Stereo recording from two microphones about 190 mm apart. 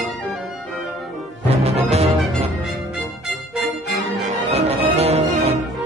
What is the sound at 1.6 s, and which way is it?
Music, 35° right (ahead or behind).